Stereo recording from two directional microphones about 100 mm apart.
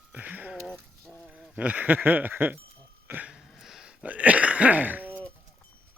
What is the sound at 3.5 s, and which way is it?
Throat clearing, 5° right (ahead or behind).